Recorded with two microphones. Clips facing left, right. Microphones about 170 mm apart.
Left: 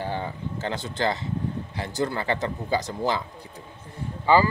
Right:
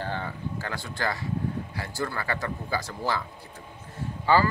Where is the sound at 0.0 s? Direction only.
15° left (ahead or behind).